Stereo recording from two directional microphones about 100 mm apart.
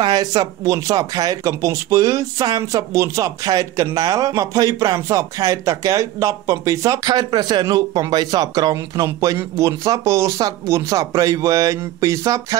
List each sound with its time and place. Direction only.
0.0 s speech: 40° right (ahead or behind)
7.1 s speech: 45° right (ahead or behind)